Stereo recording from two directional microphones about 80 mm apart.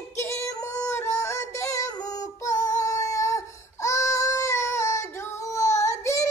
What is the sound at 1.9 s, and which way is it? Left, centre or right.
Child singing, left.